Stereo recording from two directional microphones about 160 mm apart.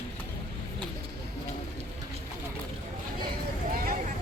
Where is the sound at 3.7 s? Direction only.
65° right (ahead or behind).